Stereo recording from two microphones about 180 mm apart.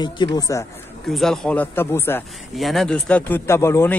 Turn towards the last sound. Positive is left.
turn(degrees=15)  # may be behind; listen again after turning